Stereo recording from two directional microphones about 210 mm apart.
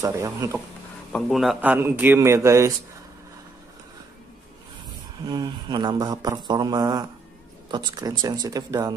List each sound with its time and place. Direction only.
0.0 s a man's voice: 15° right (ahead or behind)
1.1 s a man's voice: centre (ahead or behind)
5.2 s a man's voice: 20° right (ahead or behind)